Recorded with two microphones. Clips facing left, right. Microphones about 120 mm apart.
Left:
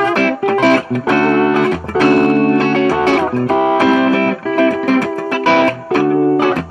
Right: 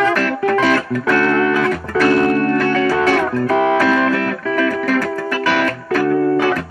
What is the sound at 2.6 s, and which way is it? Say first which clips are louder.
Music: left 3 dB; 70° left (ahead or behind).